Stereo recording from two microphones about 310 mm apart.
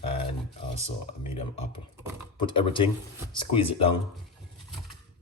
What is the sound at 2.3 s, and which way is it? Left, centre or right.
Speech, centre.